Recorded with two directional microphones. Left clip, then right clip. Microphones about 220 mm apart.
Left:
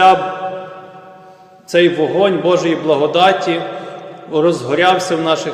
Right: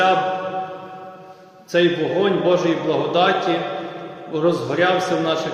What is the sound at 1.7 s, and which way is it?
A man's voice, 40° left (ahead or behind).